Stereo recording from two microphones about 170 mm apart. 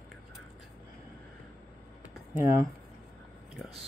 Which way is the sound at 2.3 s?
15° right (ahead or behind).